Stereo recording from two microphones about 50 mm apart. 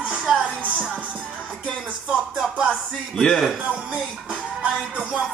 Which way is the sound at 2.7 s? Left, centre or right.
Centre.